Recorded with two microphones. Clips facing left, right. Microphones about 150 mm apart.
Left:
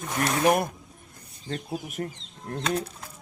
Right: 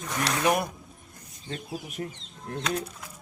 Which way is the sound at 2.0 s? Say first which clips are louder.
Left 2 dB; 45° left (ahead or behind).